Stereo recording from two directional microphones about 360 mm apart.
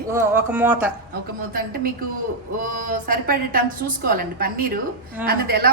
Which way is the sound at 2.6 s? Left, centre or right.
Right.